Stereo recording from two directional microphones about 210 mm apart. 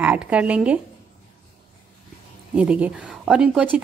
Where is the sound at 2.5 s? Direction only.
5° right (ahead or behind).